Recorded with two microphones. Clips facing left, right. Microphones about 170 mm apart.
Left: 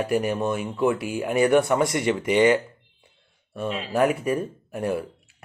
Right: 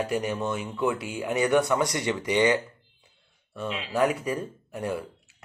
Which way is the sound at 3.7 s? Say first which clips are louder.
Left 4 dB; 40° left (ahead or behind).